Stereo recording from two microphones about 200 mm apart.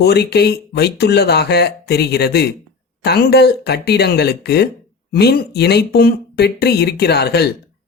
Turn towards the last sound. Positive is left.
turn(degrees=55)  # may be behind; listen again after turning